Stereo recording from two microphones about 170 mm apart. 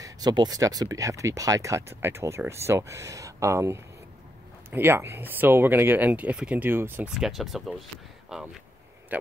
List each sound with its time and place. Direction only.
0.0 s speech: 25° right (ahead or behind)
7.2 s speech: centre (ahead or behind)